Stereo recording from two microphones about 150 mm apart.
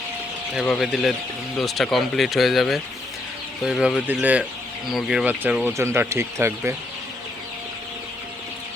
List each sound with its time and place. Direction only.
0.5 s speech: centre (ahead or behind); by 6.7 s 15° right (ahead or behind)